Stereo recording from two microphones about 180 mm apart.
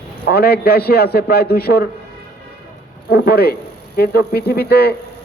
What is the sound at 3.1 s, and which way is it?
A man's voice, 60° left (ahead or behind).